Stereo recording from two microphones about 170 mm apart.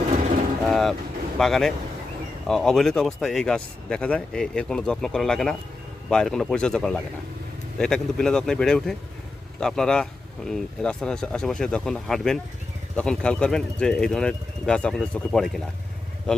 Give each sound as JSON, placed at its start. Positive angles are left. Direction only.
{"t": 0.7, "sound": "vehicle", "side_deg": 0}
{"t": 1.4, "sound": "speech", "side_deg": 0}